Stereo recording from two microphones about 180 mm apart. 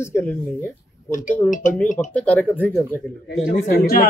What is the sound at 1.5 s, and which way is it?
Speech, 45° left (ahead or behind).